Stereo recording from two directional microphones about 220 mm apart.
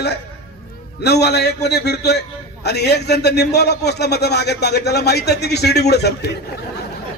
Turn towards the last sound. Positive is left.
turn(degrees=50)  # may be behind; listen again after turning